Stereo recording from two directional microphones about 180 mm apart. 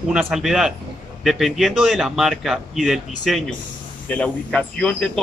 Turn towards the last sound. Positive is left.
turn(degrees=5)  # may be behind; listen again after turning